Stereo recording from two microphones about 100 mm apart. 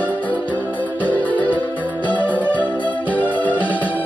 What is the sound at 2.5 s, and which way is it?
Music, 50° right (ahead or behind).